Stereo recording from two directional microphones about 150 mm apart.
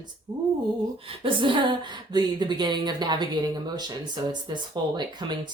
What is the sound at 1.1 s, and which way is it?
Speech, 35° right (ahead or behind).